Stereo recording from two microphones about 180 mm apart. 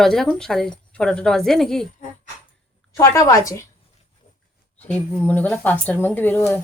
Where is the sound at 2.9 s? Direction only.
15° left (ahead or behind).